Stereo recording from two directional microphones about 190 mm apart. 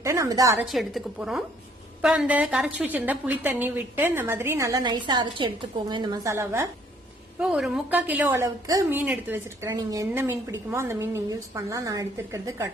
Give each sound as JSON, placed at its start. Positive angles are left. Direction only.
{"t": 0.0, "sound": "a woman's voice", "side_deg": -15}
{"t": 0.6, "sound": "a woman's voice", "side_deg": 0}
{"t": 7.3, "sound": "a woman's voice", "side_deg": -5}